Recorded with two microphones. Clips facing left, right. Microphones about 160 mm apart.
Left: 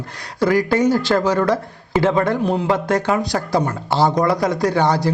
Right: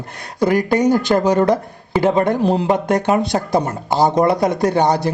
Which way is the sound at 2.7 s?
20° right (ahead or behind).